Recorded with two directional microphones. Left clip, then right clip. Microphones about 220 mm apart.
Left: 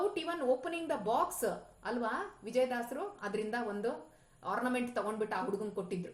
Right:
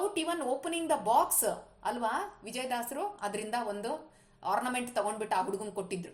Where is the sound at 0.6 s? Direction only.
25° right (ahead or behind).